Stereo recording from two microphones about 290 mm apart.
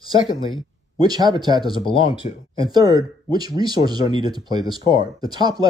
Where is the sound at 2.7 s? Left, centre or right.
Centre.